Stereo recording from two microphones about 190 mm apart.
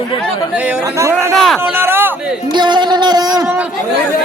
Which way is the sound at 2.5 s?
25° right (ahead or behind).